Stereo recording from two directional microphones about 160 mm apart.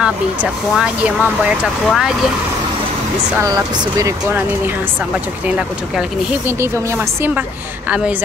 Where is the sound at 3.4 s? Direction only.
25° right (ahead or behind).